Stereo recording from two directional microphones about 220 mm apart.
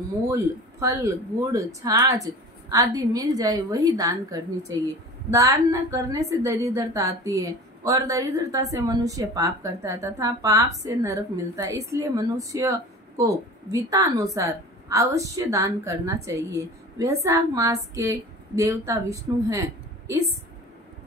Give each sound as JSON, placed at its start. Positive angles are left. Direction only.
{"t": 0.3, "sound": "a woman's voice", "side_deg": -15}